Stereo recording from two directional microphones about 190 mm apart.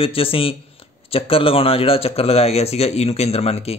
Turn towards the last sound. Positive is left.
turn(degrees=30)  # may be behind; listen again after turning